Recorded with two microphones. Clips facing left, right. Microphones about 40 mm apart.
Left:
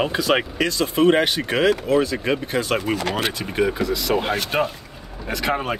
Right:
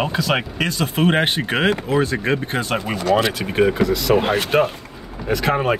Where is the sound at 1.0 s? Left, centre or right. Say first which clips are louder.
Left 1 dB; right.